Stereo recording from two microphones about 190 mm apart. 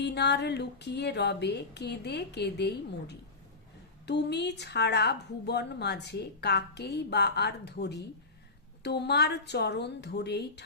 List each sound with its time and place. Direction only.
0.0 s a woman's voice: 60° left (ahead or behind)